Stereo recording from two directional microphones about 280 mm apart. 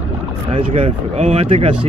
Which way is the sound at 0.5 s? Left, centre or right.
Centre.